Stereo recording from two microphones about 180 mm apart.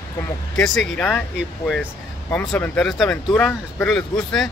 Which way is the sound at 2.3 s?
5° left (ahead or behind).